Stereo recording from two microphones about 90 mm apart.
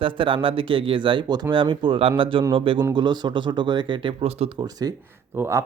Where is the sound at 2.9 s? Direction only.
55° right (ahead or behind).